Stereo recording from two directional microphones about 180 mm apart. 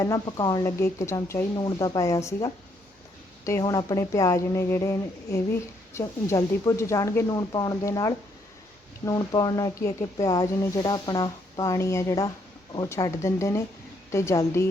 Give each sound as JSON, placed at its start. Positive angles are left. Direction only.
{"t": 0.0, "sound": "speech", "side_deg": 20}